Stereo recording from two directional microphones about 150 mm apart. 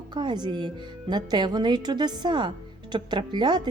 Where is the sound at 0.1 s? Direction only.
30° right (ahead or behind).